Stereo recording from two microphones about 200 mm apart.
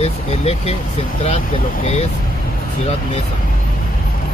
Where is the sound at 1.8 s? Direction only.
30° left (ahead or behind).